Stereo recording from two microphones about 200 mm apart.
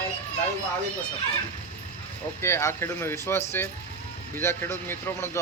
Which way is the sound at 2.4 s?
10° left (ahead or behind).